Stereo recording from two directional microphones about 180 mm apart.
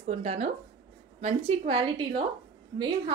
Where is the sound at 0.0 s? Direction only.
40° right (ahead or behind).